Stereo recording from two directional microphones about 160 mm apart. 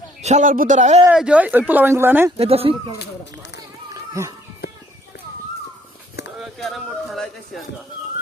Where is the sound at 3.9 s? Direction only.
20° right (ahead or behind).